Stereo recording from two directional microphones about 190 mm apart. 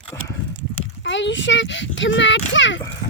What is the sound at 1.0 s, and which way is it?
Speech, 75° left (ahead or behind).